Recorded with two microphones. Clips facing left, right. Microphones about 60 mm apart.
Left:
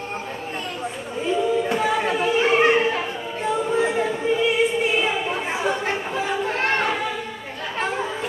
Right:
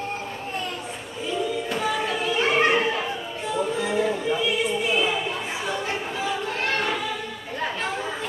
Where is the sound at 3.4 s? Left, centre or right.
Left.